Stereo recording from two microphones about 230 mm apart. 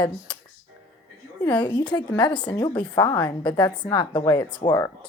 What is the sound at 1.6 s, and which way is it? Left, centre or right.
A woman's voice, centre.